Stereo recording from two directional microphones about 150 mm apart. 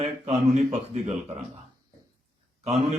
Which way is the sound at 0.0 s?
50° right (ahead or behind).